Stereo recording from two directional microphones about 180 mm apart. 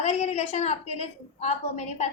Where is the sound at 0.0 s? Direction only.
40° left (ahead or behind).